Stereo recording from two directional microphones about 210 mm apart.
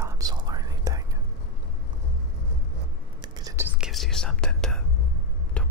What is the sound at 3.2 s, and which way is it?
Whispering, 15° right (ahead or behind).